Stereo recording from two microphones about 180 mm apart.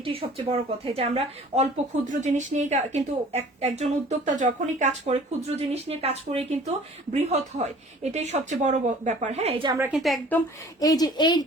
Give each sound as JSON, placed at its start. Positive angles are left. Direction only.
{"t": 0.0, "sound": "speech", "side_deg": -30}
{"t": 9.7, "sound": "a woman's voice", "side_deg": -10}
{"t": 10.0, "sound": "a woman's voice", "side_deg": 5}
{"t": 10.8, "sound": "speech", "side_deg": 20}